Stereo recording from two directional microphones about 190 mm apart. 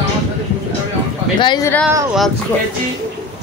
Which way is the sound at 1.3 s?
25° left (ahead or behind).